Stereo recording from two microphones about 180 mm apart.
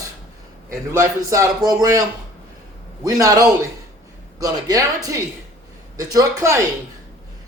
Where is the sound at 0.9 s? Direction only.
15° right (ahead or behind).